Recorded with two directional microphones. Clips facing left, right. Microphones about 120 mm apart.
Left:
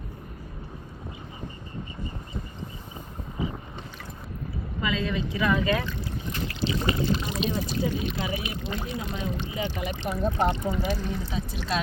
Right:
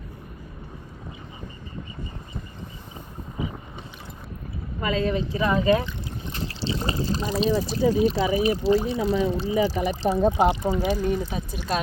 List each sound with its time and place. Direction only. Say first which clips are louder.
4.8 s speech: right 4 dB; 40° right (ahead or behind)
10.8 s speech: right 6 dB; 15° right (ahead or behind)
11.2 s speech: right 2 dB; 50° right (ahead or behind)